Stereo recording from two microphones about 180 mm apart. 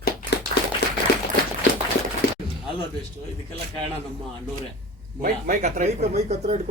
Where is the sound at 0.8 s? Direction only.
65° left (ahead or behind).